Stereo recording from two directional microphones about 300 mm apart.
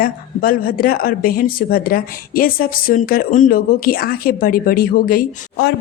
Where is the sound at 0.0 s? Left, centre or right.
Left.